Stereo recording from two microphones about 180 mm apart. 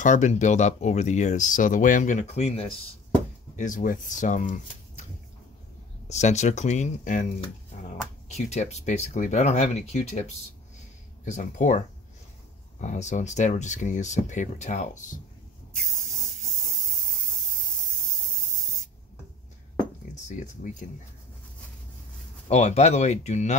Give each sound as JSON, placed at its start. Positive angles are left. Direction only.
{"t": 0.0, "sound": "speech", "side_deg": 40}
{"t": 3.5, "sound": "speech", "side_deg": 45}
{"t": 6.0, "sound": "speech", "side_deg": 40}
{"t": 12.8, "sound": "speech", "side_deg": 40}
{"t": 15.8, "sound": "spray", "side_deg": 0}
{"t": 22.5, "sound": "speech", "side_deg": 40}